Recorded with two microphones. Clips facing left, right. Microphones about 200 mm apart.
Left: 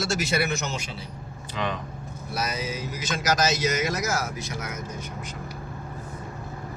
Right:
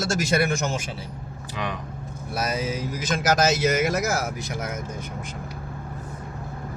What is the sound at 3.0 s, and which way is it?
Speech, 55° right (ahead or behind).